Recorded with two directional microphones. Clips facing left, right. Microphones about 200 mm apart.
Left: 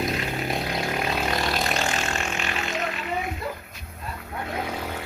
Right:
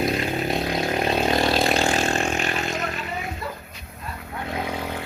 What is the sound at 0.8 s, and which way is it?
Vehicle, 25° right (ahead or behind).